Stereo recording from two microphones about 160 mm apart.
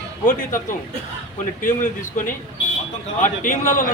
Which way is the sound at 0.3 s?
55° left (ahead or behind).